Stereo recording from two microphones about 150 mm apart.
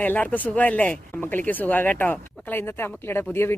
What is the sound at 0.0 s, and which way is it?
Speech, 10° left (ahead or behind).